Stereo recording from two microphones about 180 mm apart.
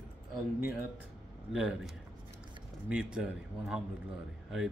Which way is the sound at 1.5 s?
5° right (ahead or behind).